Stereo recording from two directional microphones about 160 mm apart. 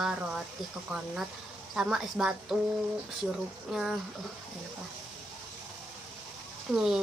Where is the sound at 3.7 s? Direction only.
5° right (ahead or behind).